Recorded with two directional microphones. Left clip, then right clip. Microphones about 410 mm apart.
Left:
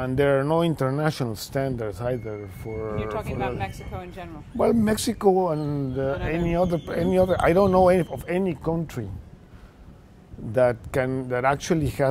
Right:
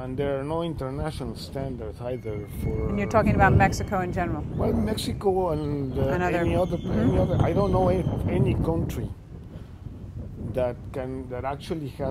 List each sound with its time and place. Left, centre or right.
0.0 s speech: left
3.0 s speech: right
4.6 s speech: left
7.2 s speech: left
10.5 s speech: left